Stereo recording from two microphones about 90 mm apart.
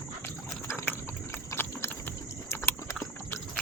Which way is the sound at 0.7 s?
30° left (ahead or behind).